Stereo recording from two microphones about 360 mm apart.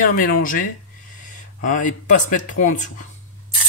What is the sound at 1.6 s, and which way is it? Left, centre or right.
Speech, left.